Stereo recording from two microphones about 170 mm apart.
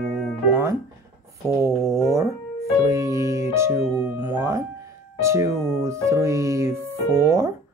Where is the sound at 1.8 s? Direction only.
15° right (ahead or behind).